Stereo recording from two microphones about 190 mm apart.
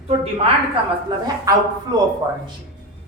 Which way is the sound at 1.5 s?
15° right (ahead or behind).